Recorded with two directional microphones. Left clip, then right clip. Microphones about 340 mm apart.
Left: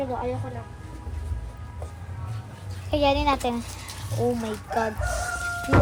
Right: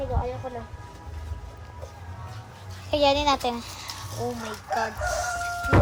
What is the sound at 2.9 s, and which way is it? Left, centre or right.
A child's voice, centre.